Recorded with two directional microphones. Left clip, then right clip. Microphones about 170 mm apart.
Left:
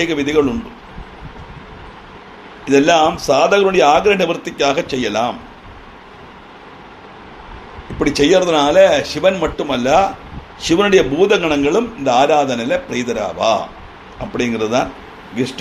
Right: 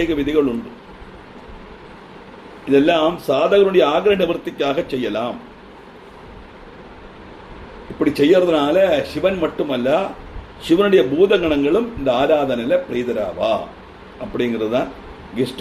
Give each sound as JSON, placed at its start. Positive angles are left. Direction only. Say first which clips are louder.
{"t": 0.0, "sound": "a man's voice", "louder": "left 3 dB", "side_deg": 30}
{"t": 2.6, "sound": "a man's voice", "louder": "left 3 dB", "side_deg": 40}
{"t": 7.9, "sound": "a man's voice", "louder": "left 2 dB", "side_deg": 30}